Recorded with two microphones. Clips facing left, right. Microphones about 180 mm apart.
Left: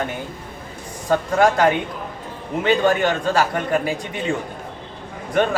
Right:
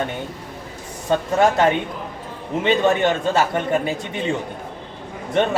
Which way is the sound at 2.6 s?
25° right (ahead or behind).